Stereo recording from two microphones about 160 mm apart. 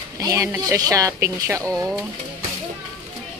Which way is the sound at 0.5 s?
20° right (ahead or behind).